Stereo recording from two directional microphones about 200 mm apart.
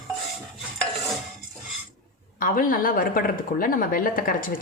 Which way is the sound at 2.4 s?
45° left (ahead or behind).